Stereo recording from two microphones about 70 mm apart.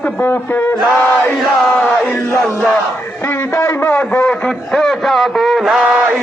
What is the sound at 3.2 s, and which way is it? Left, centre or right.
Speech, left.